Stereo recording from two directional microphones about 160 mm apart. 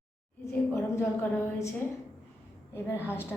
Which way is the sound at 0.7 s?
15° left (ahead or behind).